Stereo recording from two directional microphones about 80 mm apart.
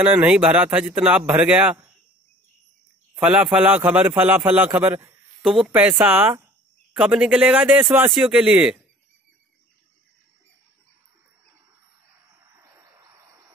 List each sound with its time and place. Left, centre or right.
0.0 s speech: centre
3.2 s speech: centre
3.6 s a man's voice: right
5.4 s speech: centre
5.9 s a man's voice: right
6.9 s speech: centre
12.6 s bird: right